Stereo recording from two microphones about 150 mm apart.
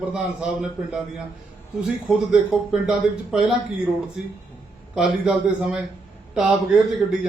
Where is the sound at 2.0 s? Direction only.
5° right (ahead or behind).